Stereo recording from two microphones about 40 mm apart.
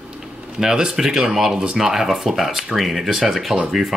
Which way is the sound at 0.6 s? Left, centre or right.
Centre.